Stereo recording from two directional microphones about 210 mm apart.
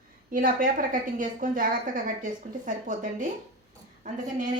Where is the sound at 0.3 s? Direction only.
40° right (ahead or behind).